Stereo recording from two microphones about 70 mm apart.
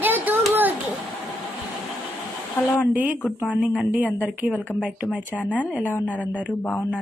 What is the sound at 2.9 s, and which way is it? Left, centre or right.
A woman's voice, right.